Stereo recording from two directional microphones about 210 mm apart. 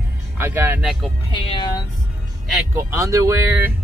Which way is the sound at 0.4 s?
10° right (ahead or behind).